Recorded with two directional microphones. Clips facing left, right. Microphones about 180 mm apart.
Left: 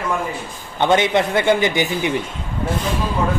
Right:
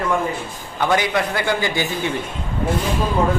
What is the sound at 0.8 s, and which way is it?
Speech, 25° left (ahead or behind).